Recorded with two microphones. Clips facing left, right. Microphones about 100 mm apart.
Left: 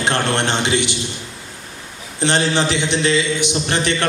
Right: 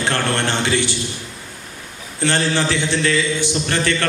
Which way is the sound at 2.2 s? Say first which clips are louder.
Left 1 dB; 20° left (ahead or behind).